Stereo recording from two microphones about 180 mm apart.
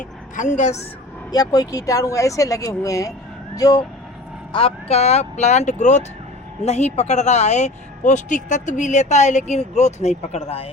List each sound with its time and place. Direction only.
0.3 s speech: 40° left (ahead or behind)
1.3 s speech: 20° left (ahead or behind)
4.5 s speech: 35° left (ahead or behind)